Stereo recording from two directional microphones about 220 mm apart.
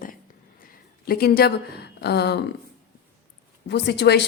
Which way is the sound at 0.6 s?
45° left (ahead or behind).